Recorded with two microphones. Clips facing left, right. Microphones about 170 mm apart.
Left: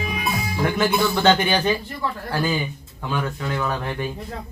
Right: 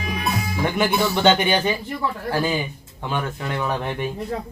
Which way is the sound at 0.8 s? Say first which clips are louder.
Right 1 dB; 20° right (ahead or behind).